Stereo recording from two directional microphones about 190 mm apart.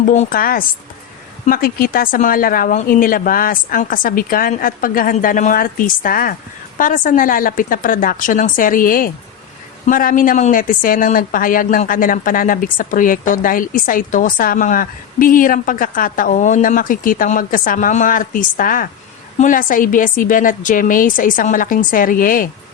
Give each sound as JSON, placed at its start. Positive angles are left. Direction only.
{"t": 0.0, "sound": "speech", "side_deg": 40}